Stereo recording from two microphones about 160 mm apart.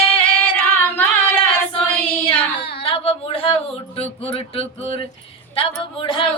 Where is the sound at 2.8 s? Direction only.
35° left (ahead or behind).